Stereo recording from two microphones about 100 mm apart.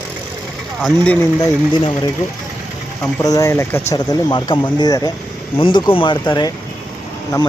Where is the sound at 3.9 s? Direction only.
40° left (ahead or behind).